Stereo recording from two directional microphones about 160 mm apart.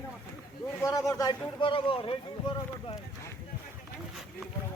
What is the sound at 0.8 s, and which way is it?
A man's voice, 20° left (ahead or behind).